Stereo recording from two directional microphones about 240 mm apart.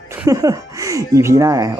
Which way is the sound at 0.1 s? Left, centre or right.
Centre.